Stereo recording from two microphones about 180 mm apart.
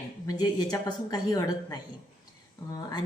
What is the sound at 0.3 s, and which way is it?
A woman's voice, 20° left (ahead or behind).